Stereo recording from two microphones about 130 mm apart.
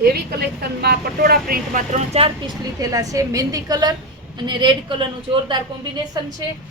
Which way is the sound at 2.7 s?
25° right (ahead or behind).